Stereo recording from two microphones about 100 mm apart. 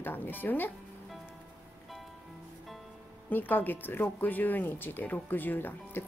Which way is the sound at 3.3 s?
20° left (ahead or behind).